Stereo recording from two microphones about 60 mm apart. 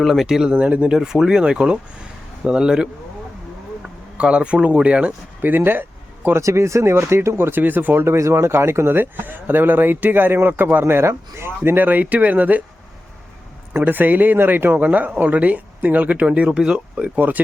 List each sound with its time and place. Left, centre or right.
0.0 s speech: centre
0.5 s speech: right
0.9 s speech: centre
5.4 s a sound: right
6.4 s speech: right
7.6 s speech: right
8.0 s speech: right
13.7 s speech: right; by 17.1 s centre
17.2 s speech: right